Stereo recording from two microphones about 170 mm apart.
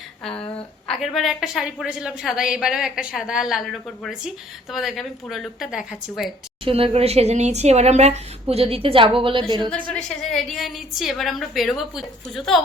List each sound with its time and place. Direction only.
0.3 s speech: 35° left (ahead or behind)
0.9 s a woman's voice: centre (ahead or behind)
6.7 s a woman's voice: 35° right (ahead or behind)
9.9 s a woman's voice: centre (ahead or behind)